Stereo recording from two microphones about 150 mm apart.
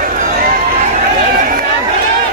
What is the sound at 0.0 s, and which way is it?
Run, 65° right (ahead or behind).